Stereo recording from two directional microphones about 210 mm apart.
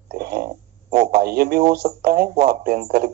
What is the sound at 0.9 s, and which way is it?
Speech, 30° right (ahead or behind).